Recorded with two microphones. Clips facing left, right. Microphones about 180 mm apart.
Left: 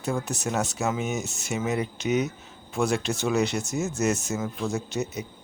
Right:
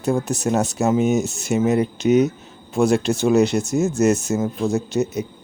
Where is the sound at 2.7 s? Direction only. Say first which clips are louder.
Right 8 dB; 35° right (ahead or behind).